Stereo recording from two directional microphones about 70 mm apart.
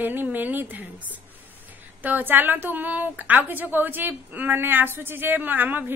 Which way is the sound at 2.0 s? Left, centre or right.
Right.